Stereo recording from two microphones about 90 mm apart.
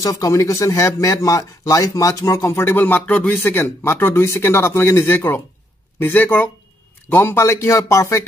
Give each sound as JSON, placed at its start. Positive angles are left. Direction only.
{"t": 0.0, "sound": "a man's voice", "side_deg": 40}